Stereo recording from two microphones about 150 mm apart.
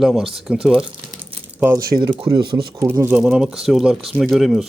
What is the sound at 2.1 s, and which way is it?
Speech, 30° right (ahead or behind).